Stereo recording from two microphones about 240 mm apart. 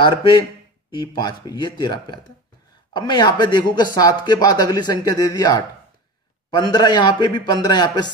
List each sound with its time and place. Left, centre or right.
0.9 s speech: centre